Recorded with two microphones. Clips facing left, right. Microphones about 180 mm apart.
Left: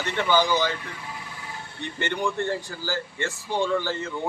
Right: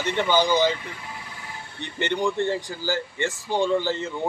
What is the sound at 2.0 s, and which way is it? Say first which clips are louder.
Speech: right 3 dB; 15° right (ahead or behind).